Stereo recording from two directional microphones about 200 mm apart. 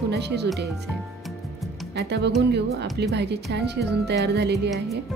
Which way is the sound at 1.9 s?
55° right (ahead or behind).